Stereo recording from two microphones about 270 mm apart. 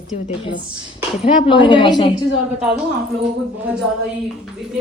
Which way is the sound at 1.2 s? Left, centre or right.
Centre.